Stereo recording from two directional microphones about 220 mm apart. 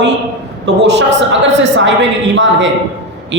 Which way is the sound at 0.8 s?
55° right (ahead or behind).